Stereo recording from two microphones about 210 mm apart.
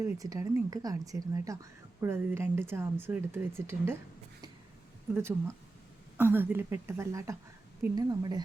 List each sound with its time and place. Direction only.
0.0 s speech: 15° right (ahead or behind)
5.1 s speech: 10° right (ahead or behind)